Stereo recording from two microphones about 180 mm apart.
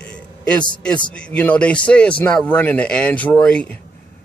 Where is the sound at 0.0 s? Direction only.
5° left (ahead or behind).